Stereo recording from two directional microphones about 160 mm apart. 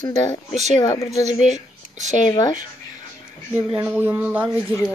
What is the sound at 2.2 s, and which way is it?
Speech, 25° left (ahead or behind).